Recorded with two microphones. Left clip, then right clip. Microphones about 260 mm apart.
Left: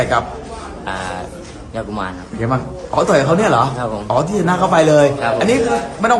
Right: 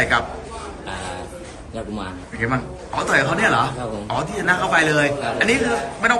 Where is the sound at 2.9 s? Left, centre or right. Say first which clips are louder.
Left 5 dB; left.